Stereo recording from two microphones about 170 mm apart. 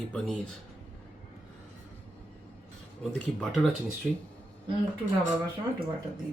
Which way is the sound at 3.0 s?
Centre (ahead or behind).